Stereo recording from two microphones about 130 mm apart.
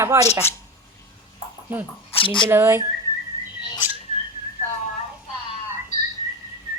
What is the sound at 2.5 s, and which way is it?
Speech, 20° right (ahead or behind).